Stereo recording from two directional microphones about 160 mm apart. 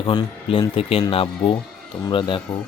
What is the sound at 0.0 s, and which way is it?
Speech, 30° left (ahead or behind).